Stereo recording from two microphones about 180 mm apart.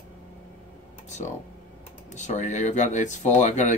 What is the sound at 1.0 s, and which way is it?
Speech, 40° left (ahead or behind).